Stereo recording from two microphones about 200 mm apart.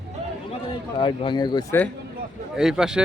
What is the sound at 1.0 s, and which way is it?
Speech, 25° left (ahead or behind).